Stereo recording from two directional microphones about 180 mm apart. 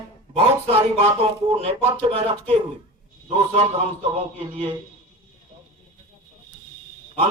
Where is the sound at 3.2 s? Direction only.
30° right (ahead or behind).